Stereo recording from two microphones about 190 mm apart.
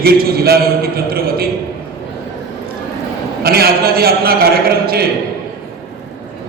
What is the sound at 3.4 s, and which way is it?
A man's voice, 55° right (ahead or behind).